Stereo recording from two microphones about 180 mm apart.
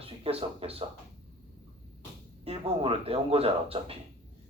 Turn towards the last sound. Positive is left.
turn(degrees=-35)  # may be behind; listen again after turning